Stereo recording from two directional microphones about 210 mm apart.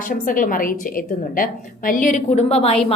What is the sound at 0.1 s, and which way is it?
A woman's voice, 40° left (ahead or behind).